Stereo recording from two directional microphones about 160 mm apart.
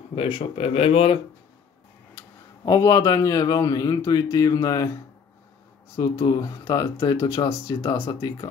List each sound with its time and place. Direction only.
0.1 s speech: 35° left (ahead or behind)
2.6 s speech: 20° left (ahead or behind)
5.9 s speech: 20° left (ahead or behind)